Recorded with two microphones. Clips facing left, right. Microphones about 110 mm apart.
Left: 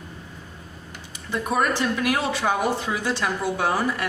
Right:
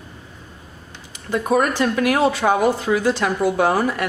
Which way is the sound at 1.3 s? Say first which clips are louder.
Right 5 dB; 55° right (ahead or behind).